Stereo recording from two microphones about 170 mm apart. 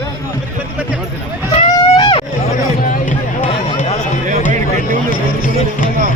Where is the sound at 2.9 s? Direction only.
50° left (ahead or behind).